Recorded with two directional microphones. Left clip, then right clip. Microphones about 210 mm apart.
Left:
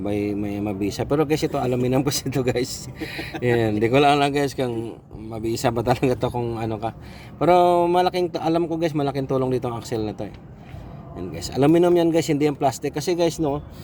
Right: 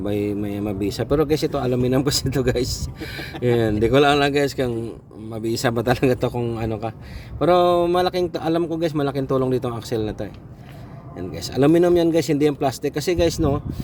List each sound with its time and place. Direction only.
0.0 s a man's voice: 5° right (ahead or behind)
11.3 s a man's voice: 5° right (ahead or behind)